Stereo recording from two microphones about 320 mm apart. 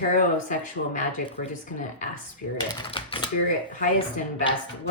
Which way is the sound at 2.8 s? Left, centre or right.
Centre.